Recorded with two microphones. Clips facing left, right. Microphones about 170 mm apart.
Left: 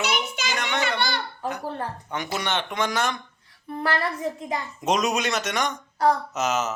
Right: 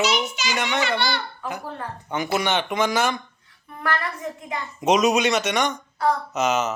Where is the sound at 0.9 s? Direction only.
50° left (ahead or behind).